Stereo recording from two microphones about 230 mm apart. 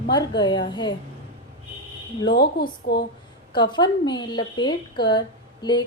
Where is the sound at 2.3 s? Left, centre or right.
Left.